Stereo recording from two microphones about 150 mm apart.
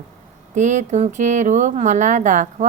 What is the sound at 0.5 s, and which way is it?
Speech, 55° right (ahead or behind).